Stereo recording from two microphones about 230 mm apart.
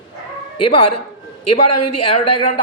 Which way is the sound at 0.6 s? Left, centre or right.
Left.